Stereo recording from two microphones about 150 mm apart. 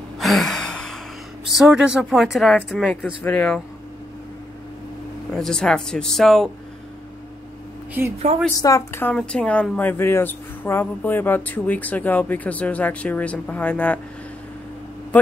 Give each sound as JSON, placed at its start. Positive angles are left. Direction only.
{"t": 0.2, "sound": "gasp", "side_deg": 0}
{"t": 1.5, "sound": "speech", "side_deg": -5}
{"t": 5.3, "sound": "speech", "side_deg": 5}
{"t": 8.0, "sound": "a woman's voice", "side_deg": -15}
{"t": 8.5, "sound": "a woman's voice", "side_deg": 20}
{"t": 9.1, "sound": "speech", "side_deg": 5}